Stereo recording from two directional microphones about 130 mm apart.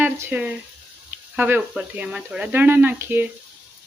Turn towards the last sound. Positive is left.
turn(degrees=-15)  # may be behind; listen again after turning